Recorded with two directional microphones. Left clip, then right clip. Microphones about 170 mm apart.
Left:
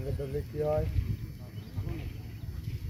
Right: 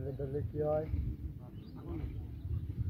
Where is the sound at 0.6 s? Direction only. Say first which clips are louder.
Left 3 dB; 20° left (ahead or behind).